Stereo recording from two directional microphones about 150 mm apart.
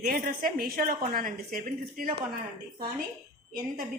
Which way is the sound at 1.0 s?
65° right (ahead or behind).